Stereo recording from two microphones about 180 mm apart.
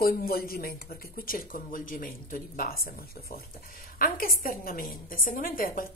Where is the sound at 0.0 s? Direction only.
55° left (ahead or behind).